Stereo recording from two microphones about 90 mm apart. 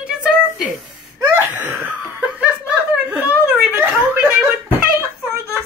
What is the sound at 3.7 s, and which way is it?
Speech, 20° right (ahead or behind).